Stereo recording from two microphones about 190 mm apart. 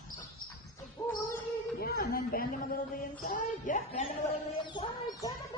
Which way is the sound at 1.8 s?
55° left (ahead or behind).